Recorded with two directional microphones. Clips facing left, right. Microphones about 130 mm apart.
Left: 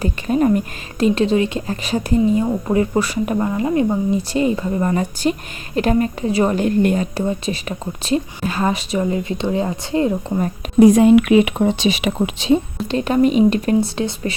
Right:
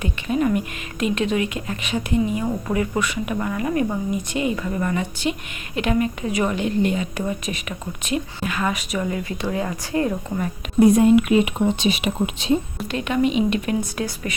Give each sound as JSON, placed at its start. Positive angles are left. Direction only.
{"t": 0.0, "sound": "speech", "side_deg": 40}
{"t": 7.2, "sound": "speech", "side_deg": 30}
{"t": 10.8, "sound": "speech", "side_deg": 90}
{"t": 12.9, "sound": "speech", "side_deg": 35}